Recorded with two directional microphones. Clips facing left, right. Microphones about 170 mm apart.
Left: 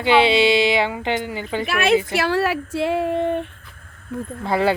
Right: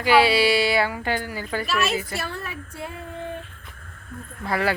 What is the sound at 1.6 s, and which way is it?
Speech, 60° left (ahead or behind).